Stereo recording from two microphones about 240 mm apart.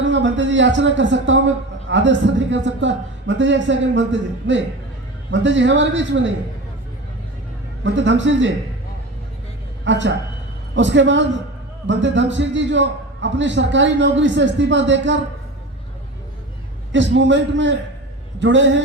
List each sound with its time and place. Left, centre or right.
0.0 s a man's voice: right
7.9 s a man's voice: right
9.8 s a man's voice: right
16.9 s a man's voice: right